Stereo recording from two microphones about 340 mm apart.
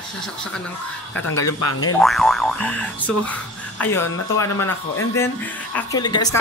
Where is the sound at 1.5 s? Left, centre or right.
Left.